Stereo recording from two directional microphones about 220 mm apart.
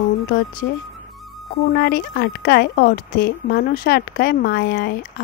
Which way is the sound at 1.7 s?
45° left (ahead or behind).